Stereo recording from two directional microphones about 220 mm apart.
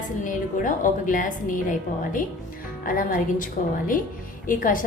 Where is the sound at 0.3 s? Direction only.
35° left (ahead or behind).